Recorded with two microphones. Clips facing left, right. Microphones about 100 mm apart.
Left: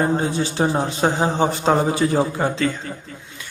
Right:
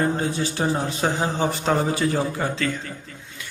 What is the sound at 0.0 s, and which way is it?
A man's voice, 25° left (ahead or behind).